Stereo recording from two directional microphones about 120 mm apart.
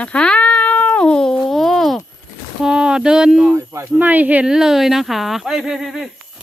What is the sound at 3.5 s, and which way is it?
Speech, 25° right (ahead or behind).